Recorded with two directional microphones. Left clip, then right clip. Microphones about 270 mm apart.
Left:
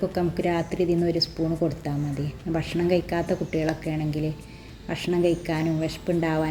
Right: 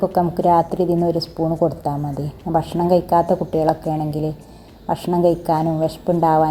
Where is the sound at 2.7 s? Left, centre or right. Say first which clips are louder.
Right 8 dB; centre.